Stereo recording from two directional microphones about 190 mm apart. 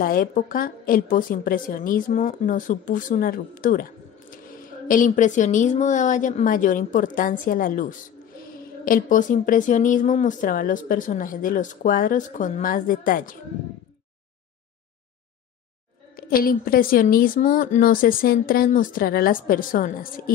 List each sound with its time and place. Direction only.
0.0 s a woman's voice: 50° left (ahead or behind)
16.2 s a woman's voice: 50° left (ahead or behind)